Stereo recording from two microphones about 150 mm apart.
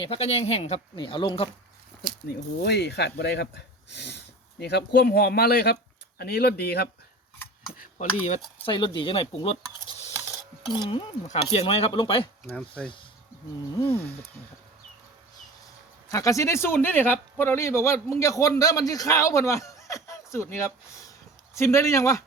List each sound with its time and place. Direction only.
0.0 s speech: 40° left (ahead or behind)
2.6 s speech: 90° left
7.8 s speech: 55° left (ahead or behind)
8.6 s speech: 30° left (ahead or behind)
10.8 s speech: 35° left (ahead or behind)
12.5 s speech: 5° left (ahead or behind)
13.7 s speech: 20° left (ahead or behind)
16.0 s a man's voice: 20° left (ahead or behind)